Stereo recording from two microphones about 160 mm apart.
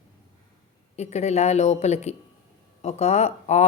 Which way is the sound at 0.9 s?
45° left (ahead or behind).